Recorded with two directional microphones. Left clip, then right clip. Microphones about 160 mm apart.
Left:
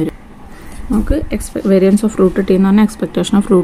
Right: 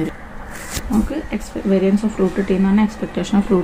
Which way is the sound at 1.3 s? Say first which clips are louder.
Left 6 dB; 50° left (ahead or behind).